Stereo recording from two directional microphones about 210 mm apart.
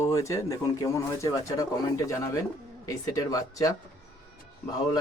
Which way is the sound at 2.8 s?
15° left (ahead or behind).